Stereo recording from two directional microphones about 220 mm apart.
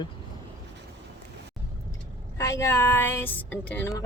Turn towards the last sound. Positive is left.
turn(degrees=10)  # may be behind; listen again after turning